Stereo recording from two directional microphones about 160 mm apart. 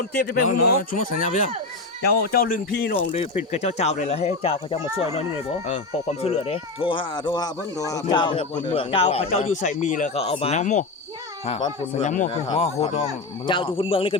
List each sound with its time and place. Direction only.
0.3 s speech: 60° left (ahead or behind)
2.0 s speech: 70° left (ahead or behind)
3.5 s speech: 45° left (ahead or behind)
12.0 s speech: 50° left (ahead or behind)
12.3 s speech: 35° left (ahead or behind)